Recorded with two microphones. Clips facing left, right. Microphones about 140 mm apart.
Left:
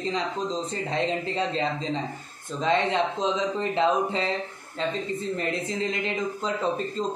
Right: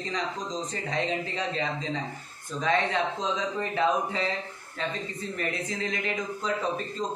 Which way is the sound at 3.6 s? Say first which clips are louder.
Left 2 dB; 25° left (ahead or behind).